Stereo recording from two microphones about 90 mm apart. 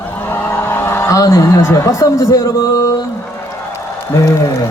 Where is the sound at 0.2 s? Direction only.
25° left (ahead or behind).